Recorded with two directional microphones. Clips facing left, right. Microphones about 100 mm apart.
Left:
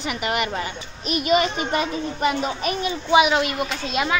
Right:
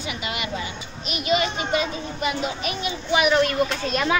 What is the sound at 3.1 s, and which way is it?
A child's voice, 20° left (ahead or behind).